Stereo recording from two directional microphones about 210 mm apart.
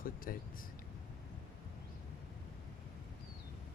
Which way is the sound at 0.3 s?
45° left (ahead or behind).